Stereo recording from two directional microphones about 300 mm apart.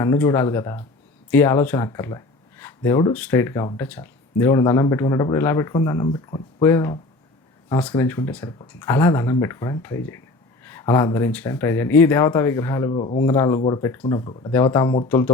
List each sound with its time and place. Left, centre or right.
0.0 s speech: centre